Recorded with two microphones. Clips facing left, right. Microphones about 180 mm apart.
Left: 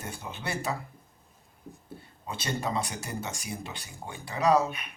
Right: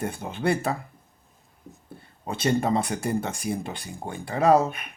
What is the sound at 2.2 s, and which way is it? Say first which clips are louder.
Speech: right 9 dB; 50° right (ahead or behind).